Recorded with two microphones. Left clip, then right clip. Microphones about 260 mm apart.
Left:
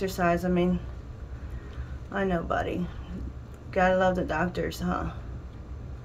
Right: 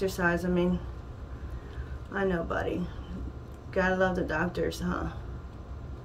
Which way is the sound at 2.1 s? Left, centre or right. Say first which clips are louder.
Left 2 dB; centre.